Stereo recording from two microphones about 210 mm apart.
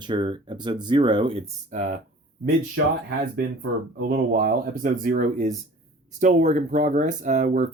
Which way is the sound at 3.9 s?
45° right (ahead or behind).